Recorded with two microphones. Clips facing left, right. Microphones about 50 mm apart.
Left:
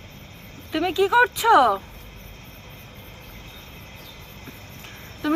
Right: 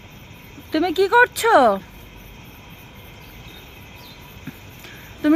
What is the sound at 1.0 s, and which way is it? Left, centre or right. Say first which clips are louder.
Speech: right 2 dB; right.